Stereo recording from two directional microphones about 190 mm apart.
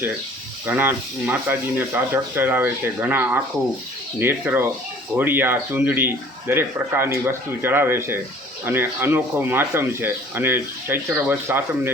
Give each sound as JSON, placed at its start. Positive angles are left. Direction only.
{"t": 0.7, "sound": "speech", "side_deg": -10}